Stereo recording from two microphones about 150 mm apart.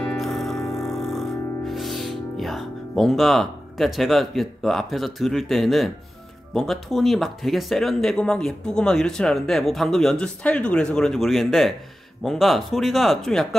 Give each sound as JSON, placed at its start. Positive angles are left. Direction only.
{"t": 0.0, "sound": "music", "side_deg": 5}
{"t": 0.6, "sound": "music", "side_deg": 20}
{"t": 0.8, "sound": "music", "side_deg": 0}
{"t": 1.7, "sound": "speech", "side_deg": 0}